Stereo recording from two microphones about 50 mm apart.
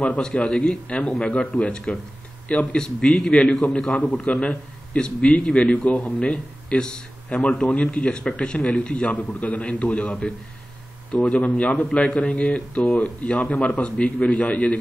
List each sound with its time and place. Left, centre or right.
0.2 s a man's voice: centre
3.9 s a man's voice: left
4.2 s a man's voice: centre